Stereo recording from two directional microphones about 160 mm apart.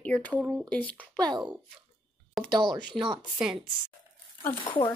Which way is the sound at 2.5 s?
25° right (ahead or behind).